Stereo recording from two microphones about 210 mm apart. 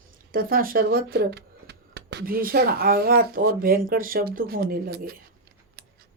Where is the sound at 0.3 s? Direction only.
45° right (ahead or behind).